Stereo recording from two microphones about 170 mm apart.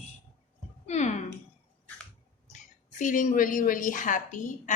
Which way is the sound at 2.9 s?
50° left (ahead or behind).